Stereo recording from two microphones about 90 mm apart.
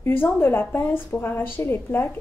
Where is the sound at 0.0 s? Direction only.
25° left (ahead or behind).